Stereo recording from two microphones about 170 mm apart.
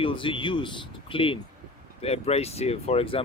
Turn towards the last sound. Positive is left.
turn(degrees=35)  # may be behind; listen again after turning